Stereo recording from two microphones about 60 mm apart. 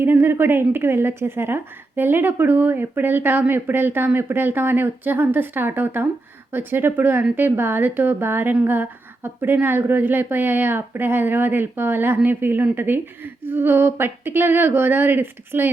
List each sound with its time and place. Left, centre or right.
0.0 s a woman's voice: right